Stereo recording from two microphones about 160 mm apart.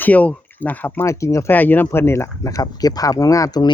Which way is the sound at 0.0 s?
10° left (ahead or behind).